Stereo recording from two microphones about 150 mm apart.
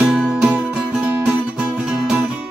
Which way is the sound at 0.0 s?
5° right (ahead or behind).